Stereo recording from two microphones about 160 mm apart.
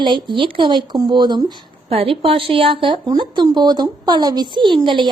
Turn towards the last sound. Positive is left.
turn(degrees=-30)  # may be behind; listen again after turning